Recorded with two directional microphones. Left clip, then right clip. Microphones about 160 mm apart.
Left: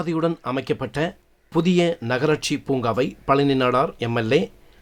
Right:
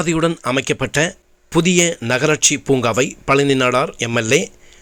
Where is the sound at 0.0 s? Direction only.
15° right (ahead or behind).